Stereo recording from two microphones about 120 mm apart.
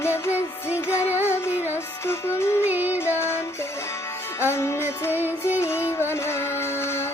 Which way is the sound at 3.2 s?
20° left (ahead or behind).